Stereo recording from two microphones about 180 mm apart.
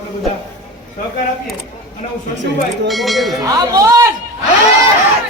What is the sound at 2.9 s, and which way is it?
Speech, centre (ahead or behind).